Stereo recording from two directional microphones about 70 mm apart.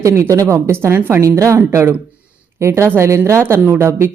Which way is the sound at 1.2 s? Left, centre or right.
Right.